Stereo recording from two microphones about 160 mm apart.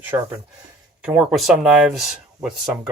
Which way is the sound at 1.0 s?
5° right (ahead or behind).